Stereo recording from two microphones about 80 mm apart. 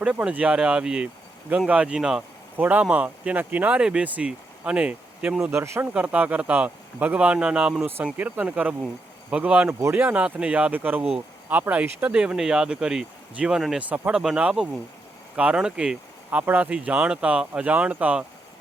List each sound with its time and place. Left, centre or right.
0.0 s speech: centre
2.6 s speech: centre
5.5 s speech: right
5.9 s speech: centre
14.2 s speech: centre